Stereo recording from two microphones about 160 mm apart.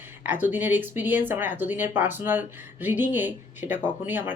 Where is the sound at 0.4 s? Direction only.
10° right (ahead or behind).